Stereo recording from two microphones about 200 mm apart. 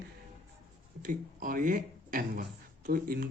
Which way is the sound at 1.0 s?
40° right (ahead or behind).